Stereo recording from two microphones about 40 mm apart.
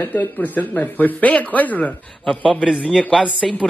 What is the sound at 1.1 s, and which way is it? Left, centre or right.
Speech, left.